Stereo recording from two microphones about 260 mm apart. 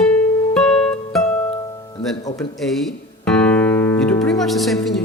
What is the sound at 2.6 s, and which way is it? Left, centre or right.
Music, centre.